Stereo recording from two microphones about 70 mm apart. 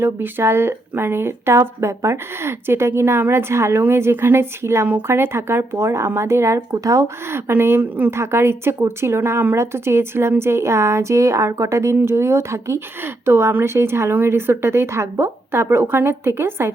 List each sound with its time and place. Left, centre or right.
0.0 s speech: right
6.7 s speech: right
7.3 s speech: right
8.1 s speech: right